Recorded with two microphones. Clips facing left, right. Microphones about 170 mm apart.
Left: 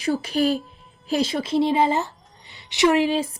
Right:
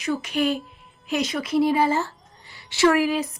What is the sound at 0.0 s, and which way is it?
A woman's voice, 35° left (ahead or behind).